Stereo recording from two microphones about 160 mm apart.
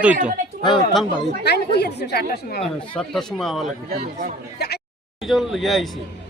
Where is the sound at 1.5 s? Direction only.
90° left.